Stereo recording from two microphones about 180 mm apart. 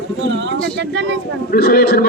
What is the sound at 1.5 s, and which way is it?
Speech, 55° left (ahead or behind).